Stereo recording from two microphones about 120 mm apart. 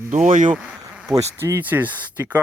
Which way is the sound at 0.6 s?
5° right (ahead or behind).